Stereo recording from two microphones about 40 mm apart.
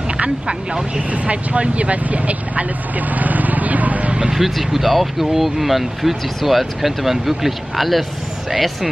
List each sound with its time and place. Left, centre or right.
0.5 s speech: right
1.1 s speech: right
4.3 s speech: centre